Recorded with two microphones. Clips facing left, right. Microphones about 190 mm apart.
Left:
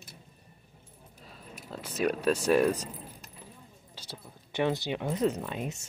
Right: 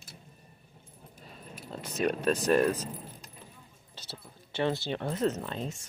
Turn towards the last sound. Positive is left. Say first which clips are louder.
# left 1 dB
turn(degrees=10)  # may be behind; listen again after turning